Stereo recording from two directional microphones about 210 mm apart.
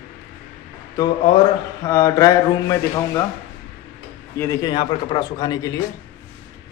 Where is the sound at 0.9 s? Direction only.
25° left (ahead or behind).